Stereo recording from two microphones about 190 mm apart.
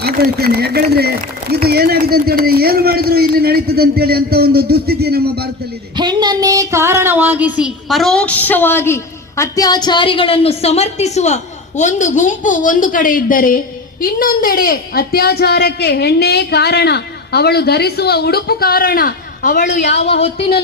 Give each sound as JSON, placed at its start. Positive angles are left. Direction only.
{"t": 0.0, "sound": "a man's voice", "side_deg": -55}
{"t": 6.0, "sound": "a woman's voice", "side_deg": -20}